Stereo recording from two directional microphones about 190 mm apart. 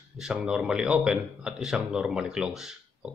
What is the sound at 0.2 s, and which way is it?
A man's voice, 5° right (ahead or behind).